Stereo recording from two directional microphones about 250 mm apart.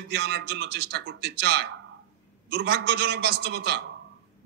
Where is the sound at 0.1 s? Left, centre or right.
Right.